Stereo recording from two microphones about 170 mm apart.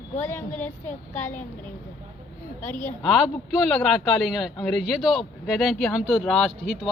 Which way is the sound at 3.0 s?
5° right (ahead or behind).